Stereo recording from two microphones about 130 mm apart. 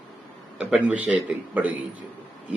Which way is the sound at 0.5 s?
10° right (ahead or behind).